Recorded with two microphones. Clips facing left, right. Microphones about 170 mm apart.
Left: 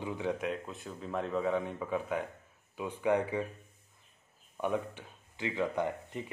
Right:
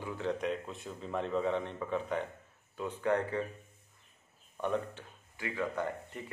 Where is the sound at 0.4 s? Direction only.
Centre (ahead or behind).